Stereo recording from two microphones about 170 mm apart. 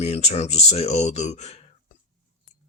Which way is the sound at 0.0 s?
40° left (ahead or behind).